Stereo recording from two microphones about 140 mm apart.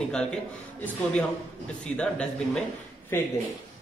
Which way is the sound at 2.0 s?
5° left (ahead or behind).